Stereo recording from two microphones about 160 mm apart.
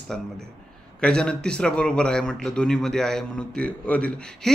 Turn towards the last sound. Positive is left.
turn(degrees=5)  # may be behind; listen again after turning